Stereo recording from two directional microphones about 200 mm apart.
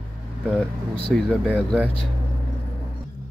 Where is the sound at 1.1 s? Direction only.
5° left (ahead or behind).